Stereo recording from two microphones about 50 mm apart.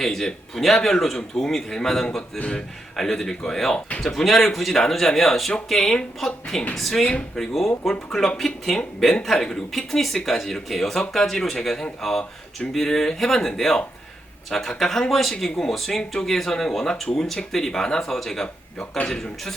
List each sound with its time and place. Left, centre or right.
0.0 s a man's voice: centre
7.0 s speech: centre
7.3 s a man's voice: centre
18.4 s speech: left
19.0 s speech: centre